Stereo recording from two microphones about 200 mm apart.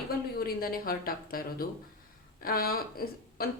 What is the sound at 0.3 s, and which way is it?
A woman's voice, 50° left (ahead or behind).